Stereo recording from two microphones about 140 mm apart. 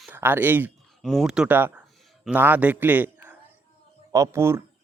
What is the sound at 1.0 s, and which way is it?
A man's voice, centre (ahead or behind).